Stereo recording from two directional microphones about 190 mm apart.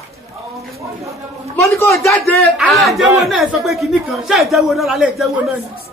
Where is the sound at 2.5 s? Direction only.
Centre (ahead or behind).